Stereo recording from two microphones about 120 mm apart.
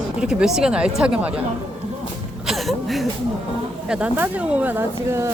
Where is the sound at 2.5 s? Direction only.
Centre (ahead or behind).